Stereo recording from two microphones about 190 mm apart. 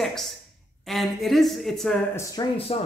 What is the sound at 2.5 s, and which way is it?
Speech, 30° left (ahead or behind).